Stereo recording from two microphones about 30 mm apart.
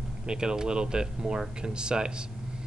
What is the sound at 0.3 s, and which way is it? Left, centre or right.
Speech, right.